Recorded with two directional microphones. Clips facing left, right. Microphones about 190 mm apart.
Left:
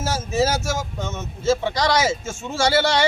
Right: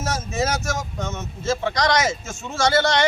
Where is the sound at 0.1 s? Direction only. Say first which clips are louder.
Left 4 dB; 30° left (ahead or behind).